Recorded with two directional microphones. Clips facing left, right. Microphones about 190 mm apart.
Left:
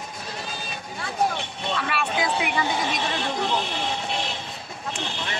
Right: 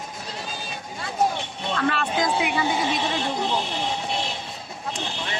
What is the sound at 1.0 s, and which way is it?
Speech, 15° right (ahead or behind).